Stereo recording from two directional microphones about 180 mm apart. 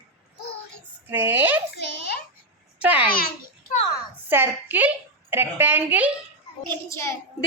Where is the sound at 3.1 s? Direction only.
55° left (ahead or behind).